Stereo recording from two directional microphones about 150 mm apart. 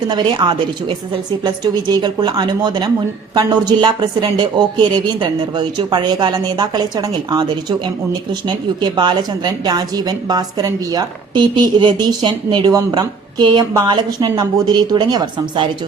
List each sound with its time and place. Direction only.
0.1 s a woman's voice: 30° right (ahead or behind)